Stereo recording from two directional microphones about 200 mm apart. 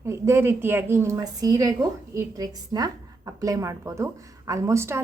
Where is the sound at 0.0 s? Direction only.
15° right (ahead or behind).